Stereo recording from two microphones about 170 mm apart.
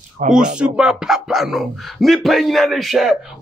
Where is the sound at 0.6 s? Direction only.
5° right (ahead or behind).